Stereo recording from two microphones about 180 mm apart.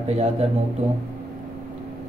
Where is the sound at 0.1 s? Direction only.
35° right (ahead or behind).